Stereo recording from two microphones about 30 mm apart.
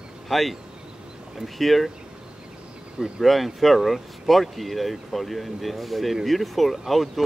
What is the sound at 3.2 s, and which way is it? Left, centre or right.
Speech, centre.